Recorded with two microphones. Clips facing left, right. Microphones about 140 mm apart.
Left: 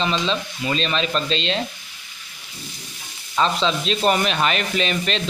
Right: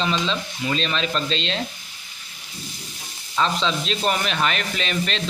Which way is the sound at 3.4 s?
15° left (ahead or behind).